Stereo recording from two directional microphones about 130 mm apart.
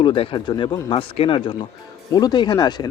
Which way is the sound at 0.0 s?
45° left (ahead or behind).